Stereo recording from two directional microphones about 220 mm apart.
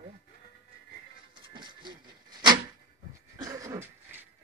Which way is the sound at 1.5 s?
20° right (ahead or behind).